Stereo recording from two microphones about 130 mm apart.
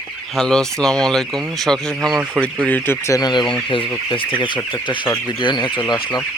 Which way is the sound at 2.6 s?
15° left (ahead or behind).